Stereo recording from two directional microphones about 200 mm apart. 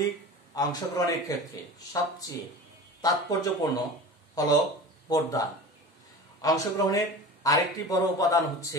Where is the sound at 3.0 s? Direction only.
20° left (ahead or behind).